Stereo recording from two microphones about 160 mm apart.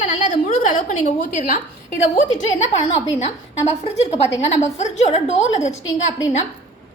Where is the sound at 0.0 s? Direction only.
50° left (ahead or behind).